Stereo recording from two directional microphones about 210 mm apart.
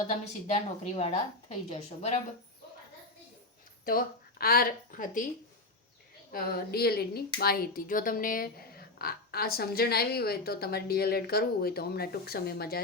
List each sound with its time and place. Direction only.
0.4 s a woman's voice: 30° left (ahead or behind)
3.8 s speech: 45° left (ahead or behind)
6.3 s speech: 45° left (ahead or behind)